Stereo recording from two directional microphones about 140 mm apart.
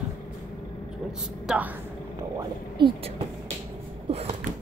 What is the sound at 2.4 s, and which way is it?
Speech, 35° right (ahead or behind).